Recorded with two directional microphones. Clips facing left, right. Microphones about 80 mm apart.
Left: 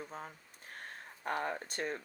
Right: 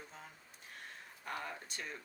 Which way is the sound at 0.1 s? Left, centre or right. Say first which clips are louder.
Left 8 dB; left.